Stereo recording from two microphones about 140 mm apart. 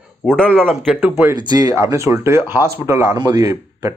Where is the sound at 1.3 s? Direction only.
30° right (ahead or behind).